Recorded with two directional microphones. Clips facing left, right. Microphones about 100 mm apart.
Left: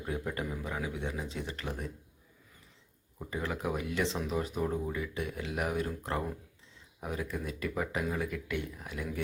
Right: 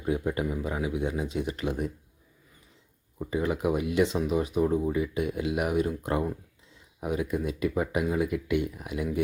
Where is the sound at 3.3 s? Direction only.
15° right (ahead or behind).